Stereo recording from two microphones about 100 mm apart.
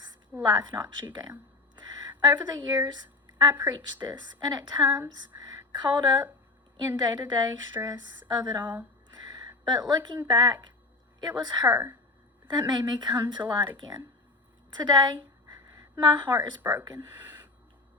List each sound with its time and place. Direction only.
0.4 s a woman's voice: 45° right (ahead or behind)
1.7 s a sound: 45° right (ahead or behind)
4.0 s a woman's voice: 45° right (ahead or behind)
8.6 s speech: 20° right (ahead or behind)
9.0 s a sound: 45° right (ahead or behind)
9.6 s a woman's voice: 45° right (ahead or behind)
16.6 s speech: 20° right (ahead or behind)
16.8 s speech: 40° right (ahead or behind)